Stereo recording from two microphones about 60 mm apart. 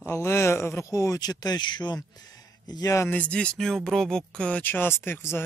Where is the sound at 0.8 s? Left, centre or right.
Left.